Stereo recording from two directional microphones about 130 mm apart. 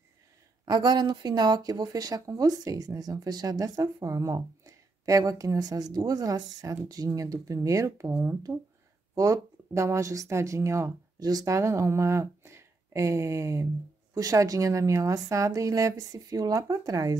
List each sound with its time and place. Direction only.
0.7 s speech: 30° right (ahead or behind)